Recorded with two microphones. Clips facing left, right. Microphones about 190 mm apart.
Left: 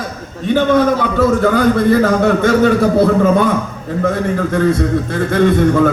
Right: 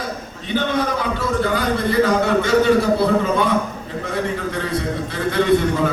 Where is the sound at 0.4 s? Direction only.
50° left (ahead or behind).